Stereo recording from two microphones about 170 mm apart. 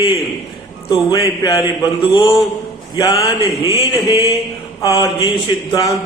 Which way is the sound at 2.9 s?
20° left (ahead or behind).